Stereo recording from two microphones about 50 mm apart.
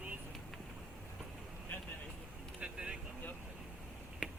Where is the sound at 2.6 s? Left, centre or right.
Right.